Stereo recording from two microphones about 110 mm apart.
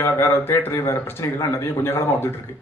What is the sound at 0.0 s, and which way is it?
A man's voice, 20° left (ahead or behind).